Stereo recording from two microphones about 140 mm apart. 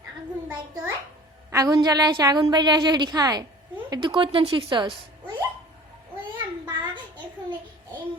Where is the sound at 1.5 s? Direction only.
25° right (ahead or behind).